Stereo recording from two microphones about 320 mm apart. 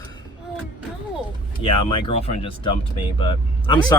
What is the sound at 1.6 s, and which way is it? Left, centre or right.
Speech, centre.